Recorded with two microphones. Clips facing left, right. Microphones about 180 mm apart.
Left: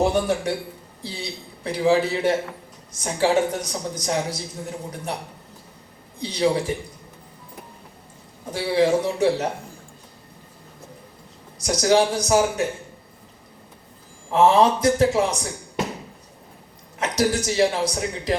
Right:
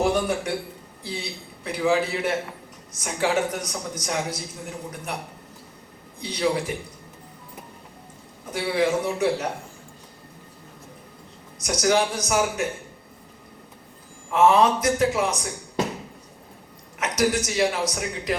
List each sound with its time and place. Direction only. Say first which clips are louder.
0.0 s a man's voice: left 2 dB; 30° left (ahead or behind)
1.6 s a man's voice: left 3 dB; 30° left (ahead or behind)
6.1 s a man's voice: left 3 dB; 30° left (ahead or behind)
8.4 s a man's voice: left 3 dB; 30° left (ahead or behind)
11.6 s a man's voice: left 3 dB; 30° left (ahead or behind)
14.3 s a man's voice: left 1 dB; 30° left (ahead or behind)
17.0 s a man's voice: left 1 dB; 30° left (ahead or behind)